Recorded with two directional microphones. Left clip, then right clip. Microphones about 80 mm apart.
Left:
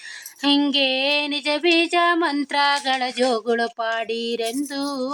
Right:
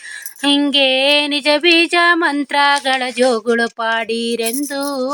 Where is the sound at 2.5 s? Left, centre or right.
Right.